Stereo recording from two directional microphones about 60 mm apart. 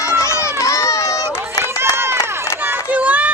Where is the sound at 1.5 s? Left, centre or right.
Right.